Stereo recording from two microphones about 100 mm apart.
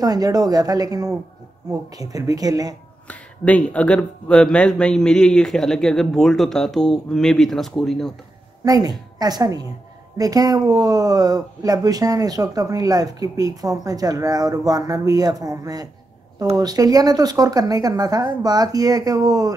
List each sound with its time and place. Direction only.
0.0 s speech: 40° right (ahead or behind)
3.1 s speech: 15° left (ahead or behind)
8.6 s speech: 40° right (ahead or behind)